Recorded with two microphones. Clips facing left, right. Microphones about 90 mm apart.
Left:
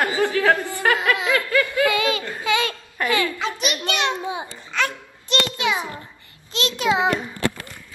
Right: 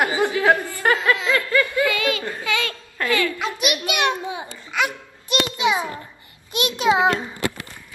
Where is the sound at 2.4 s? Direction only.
20° left (ahead or behind).